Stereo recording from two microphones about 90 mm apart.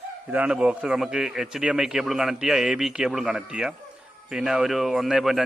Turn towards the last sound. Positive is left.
turn(degrees=0)  # may be behind; listen again after turning